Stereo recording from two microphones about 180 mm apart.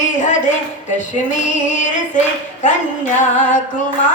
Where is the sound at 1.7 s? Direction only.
45° left (ahead or behind).